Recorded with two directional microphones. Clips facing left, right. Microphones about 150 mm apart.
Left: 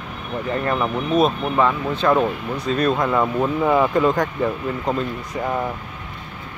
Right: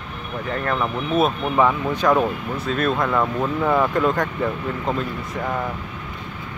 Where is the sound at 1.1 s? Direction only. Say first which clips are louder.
Left 2 dB; 5° right (ahead or behind).